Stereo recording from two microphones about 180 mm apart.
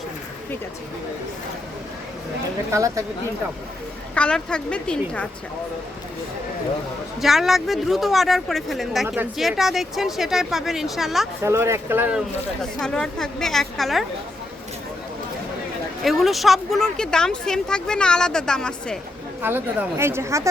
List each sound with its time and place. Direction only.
2.7 s speech: 15° right (ahead or behind)
4.1 s speech: 5° left (ahead or behind)
7.2 s speech: centre (ahead or behind)
11.4 s speech: 15° right (ahead or behind)
12.8 s speech: 5° left (ahead or behind)
16.0 s speech: centre (ahead or behind)
19.4 s speech: 10° right (ahead or behind)